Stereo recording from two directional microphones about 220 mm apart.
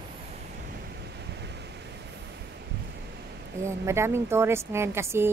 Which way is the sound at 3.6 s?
10° right (ahead or behind).